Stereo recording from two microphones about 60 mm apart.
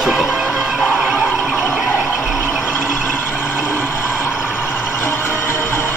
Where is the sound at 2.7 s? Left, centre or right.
Left.